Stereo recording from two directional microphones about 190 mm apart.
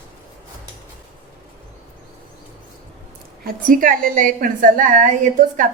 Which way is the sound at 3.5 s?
45° right (ahead or behind).